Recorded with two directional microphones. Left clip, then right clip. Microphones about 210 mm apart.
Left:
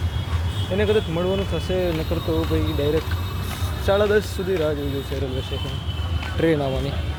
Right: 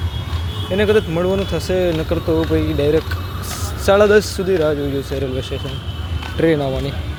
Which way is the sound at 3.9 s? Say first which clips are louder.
Right 7 dB; 25° right (ahead or behind).